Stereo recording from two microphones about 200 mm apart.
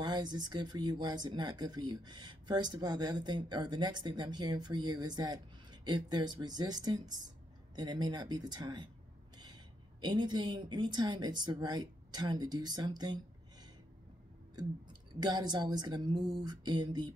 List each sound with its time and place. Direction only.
0.0 s speech: 20° right (ahead or behind)
10.0 s speech: 20° right (ahead or behind)
14.5 s speech: 20° right (ahead or behind)